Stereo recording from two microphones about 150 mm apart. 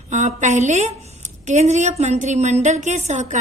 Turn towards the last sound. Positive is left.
turn(degrees=-50)  # may be behind; listen again after turning